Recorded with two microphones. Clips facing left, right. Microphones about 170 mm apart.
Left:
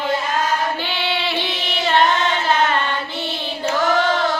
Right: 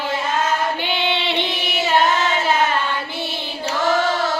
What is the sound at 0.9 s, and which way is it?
Child singing, 20° right (ahead or behind).